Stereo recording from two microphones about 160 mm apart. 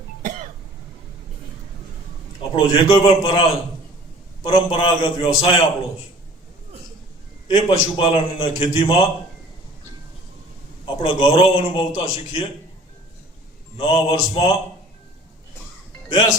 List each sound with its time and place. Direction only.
2.5 s a man's voice: 35° left (ahead or behind)
7.5 s a man's voice: 35° left (ahead or behind)
10.8 s a man's voice: 35° left (ahead or behind)
13.7 s a man's voice: 35° left (ahead or behind)